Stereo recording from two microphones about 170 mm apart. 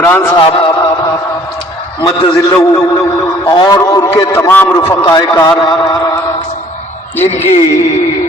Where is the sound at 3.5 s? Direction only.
20° left (ahead or behind).